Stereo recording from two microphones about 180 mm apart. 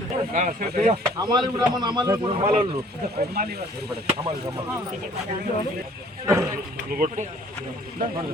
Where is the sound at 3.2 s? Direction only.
60° right (ahead or behind).